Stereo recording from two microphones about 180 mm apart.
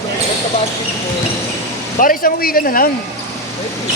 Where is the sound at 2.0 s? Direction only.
55° left (ahead or behind).